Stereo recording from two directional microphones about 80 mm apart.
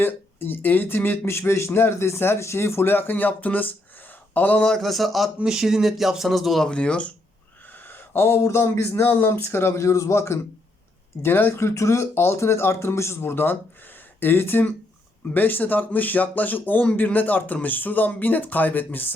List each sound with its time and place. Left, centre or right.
0.0 s speech: left
4.7 s speech: centre
6.7 s speech: centre
7.9 s speech: left